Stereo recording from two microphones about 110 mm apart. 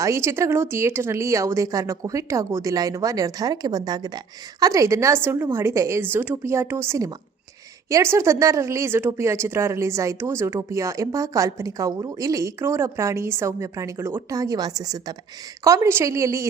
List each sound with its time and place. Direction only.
0.0 s speech: 25° right (ahead or behind)